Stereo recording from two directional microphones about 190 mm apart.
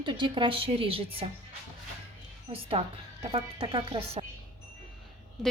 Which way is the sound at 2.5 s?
30° right (ahead or behind).